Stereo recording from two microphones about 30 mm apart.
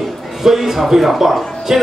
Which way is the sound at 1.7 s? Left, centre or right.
Right.